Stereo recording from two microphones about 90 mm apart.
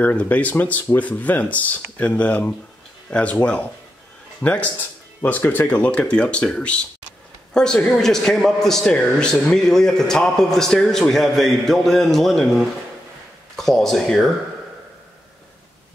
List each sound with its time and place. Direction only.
0.0 s a man's voice: 15° left (ahead or behind)